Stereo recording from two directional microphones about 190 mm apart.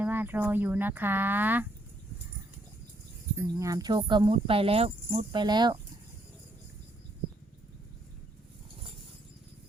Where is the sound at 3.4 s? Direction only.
15° right (ahead or behind).